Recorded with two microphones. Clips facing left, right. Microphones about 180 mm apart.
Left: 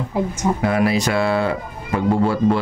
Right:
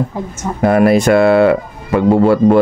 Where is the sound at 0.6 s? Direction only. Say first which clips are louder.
Right 11 dB; 50° right (ahead or behind).